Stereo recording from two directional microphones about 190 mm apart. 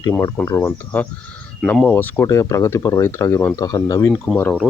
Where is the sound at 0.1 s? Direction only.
15° left (ahead or behind).